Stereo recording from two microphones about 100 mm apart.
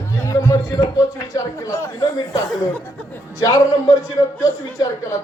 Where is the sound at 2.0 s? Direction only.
40° left (ahead or behind).